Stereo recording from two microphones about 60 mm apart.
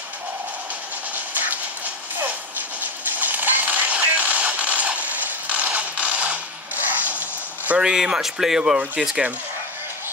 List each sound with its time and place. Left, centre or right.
1.3 s train: right
2.8 s a sound: right
7.8 s speech: centre